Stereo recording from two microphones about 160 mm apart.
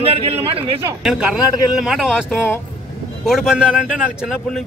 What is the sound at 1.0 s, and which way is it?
Speech, 5° right (ahead or behind).